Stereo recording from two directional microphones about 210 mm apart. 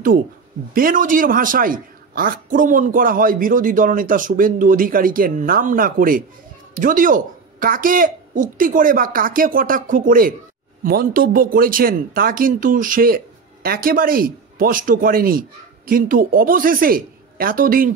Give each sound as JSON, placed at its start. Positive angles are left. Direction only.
{"t": 0.7, "sound": "a man's voice", "side_deg": -40}